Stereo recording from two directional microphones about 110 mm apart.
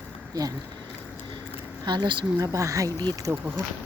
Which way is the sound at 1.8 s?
40° right (ahead or behind).